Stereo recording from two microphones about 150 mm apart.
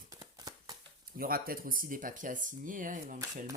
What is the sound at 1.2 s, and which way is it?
Speech, 75° right (ahead or behind).